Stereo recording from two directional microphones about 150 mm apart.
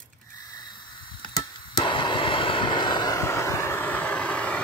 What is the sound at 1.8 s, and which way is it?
Vehicle, 35° left (ahead or behind).